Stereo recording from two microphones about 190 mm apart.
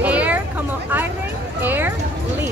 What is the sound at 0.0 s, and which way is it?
Hubbub, 5° right (ahead or behind).